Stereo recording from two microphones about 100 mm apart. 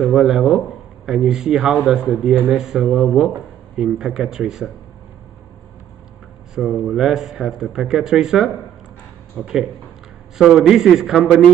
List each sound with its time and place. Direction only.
0.0 s speech: centre (ahead or behind)
6.5 s speech: 5° right (ahead or behind)